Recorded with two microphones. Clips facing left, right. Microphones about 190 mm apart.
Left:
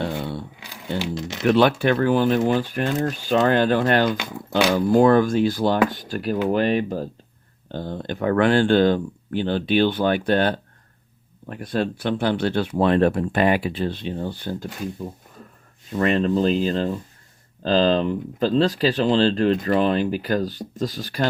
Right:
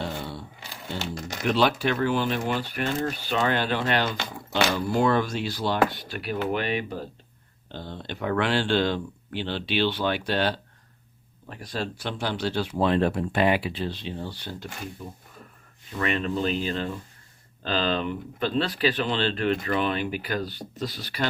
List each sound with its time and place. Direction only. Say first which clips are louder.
0.6 s a sound: left 6 dB; 15° left (ahead or behind)
1.5 s speech: left 6 dB; 55° left (ahead or behind)
16.0 s speech: left 7 dB; 40° left (ahead or behind)